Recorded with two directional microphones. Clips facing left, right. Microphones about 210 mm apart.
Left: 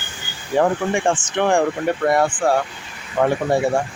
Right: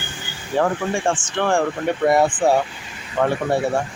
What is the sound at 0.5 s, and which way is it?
Speech, 15° left (ahead or behind).